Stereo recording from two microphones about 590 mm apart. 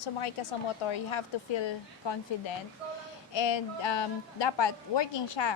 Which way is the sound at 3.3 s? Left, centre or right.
Left.